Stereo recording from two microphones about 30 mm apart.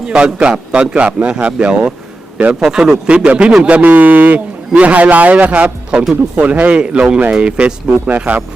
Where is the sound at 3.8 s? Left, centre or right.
Right.